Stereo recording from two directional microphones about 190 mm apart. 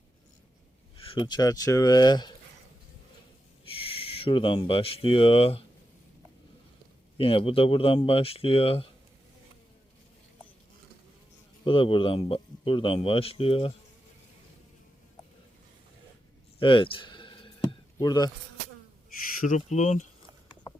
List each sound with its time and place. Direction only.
1.0 s speech: 25° left (ahead or behind)
3.7 s speech: 30° left (ahead or behind)
7.2 s speech: 30° left (ahead or behind)
11.6 s speech: 30° left (ahead or behind)
16.6 s a sound: 25° left (ahead or behind)
17.9 s speech: 20° left (ahead or behind)
19.4 s speech: 40° left (ahead or behind)